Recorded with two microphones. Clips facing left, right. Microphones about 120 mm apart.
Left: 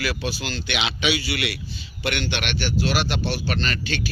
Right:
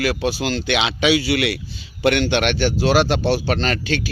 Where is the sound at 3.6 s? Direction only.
90° right.